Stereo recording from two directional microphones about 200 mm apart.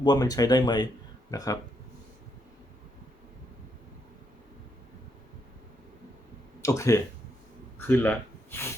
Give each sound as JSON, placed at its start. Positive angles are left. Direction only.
{"t": 0.0, "sound": "speech", "side_deg": 20}
{"t": 6.6, "sound": "speech", "side_deg": 15}